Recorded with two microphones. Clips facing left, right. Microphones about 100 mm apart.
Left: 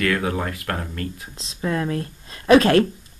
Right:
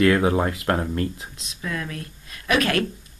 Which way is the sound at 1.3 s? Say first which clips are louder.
Left 6 dB; 30° left (ahead or behind).